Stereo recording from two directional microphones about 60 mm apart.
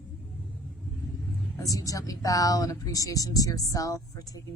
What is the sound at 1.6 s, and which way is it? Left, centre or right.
Speech, left.